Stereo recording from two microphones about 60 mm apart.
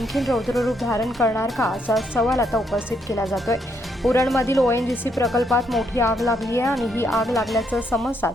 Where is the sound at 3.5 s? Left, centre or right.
Left.